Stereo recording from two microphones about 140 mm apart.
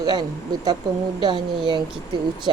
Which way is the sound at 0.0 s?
30° right (ahead or behind).